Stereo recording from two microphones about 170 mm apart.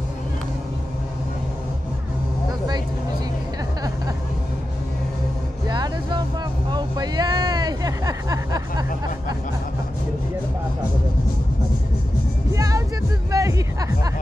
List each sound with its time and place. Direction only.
5.7 s vehicle: 25° right (ahead or behind)
6.7 s hubbub: 25° right (ahead or behind)
12.5 s music: 20° right (ahead or behind)